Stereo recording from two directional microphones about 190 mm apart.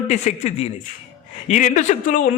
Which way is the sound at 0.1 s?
35° left (ahead or behind).